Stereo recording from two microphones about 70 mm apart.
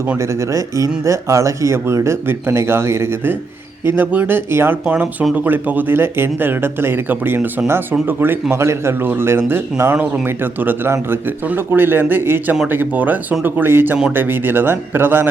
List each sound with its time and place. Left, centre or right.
0.2 s speech: right